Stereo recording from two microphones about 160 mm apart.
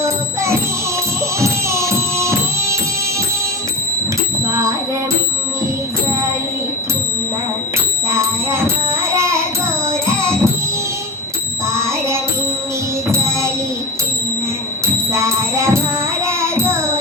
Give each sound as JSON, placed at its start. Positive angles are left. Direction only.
{"t": 1.4, "sound": "music", "side_deg": -20}
{"t": 8.1, "sound": "music", "side_deg": -15}
{"t": 11.7, "sound": "music", "side_deg": -15}
{"t": 15.1, "sound": "music", "side_deg": -15}
{"t": 16.2, "sound": "child singing", "side_deg": -15}